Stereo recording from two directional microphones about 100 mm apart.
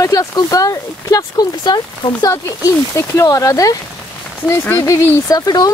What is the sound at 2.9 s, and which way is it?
Speech, 30° left (ahead or behind).